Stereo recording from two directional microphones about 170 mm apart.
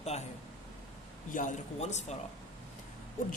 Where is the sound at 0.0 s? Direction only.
40° left (ahead or behind).